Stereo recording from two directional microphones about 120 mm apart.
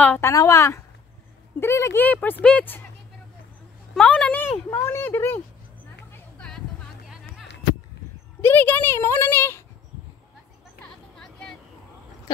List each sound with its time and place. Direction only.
0.2 s speech: 25° left (ahead or behind)
2.0 s speech: 15° left (ahead or behind)
3.9 s speech: 10° left (ahead or behind)
4.6 s speech: 20° left (ahead or behind)
6.3 s a sound: 5° left (ahead or behind)
8.4 s speech: 15° left (ahead or behind)
10.8 s vehicle: 5° left (ahead or behind)